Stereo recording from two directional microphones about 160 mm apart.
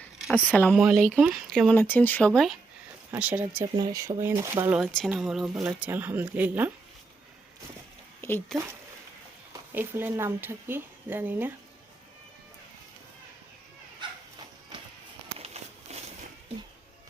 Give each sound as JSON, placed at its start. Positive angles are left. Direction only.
{"t": 0.5, "sound": "speech", "side_deg": 10}
{"t": 0.8, "sound": "speech", "side_deg": -5}
{"t": 3.1, "sound": "speech", "side_deg": -10}
{"t": 3.8, "sound": "speech", "side_deg": -25}
{"t": 4.9, "sound": "speech", "side_deg": 5}
{"t": 8.2, "sound": "a sound", "side_deg": 15}
{"t": 9.5, "sound": "speech", "side_deg": -15}
{"t": 15.4, "sound": "a sound", "side_deg": -40}